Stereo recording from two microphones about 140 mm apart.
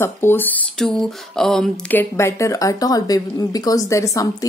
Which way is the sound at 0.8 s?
Centre (ahead or behind).